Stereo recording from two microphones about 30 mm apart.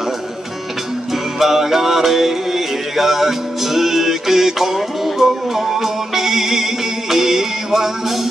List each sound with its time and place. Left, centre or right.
1.4 s music: centre